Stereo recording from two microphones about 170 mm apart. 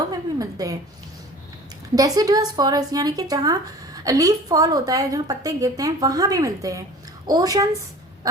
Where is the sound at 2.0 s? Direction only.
20° right (ahead or behind).